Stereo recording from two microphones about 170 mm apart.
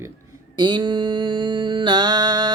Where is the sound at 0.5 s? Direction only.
25° right (ahead or behind).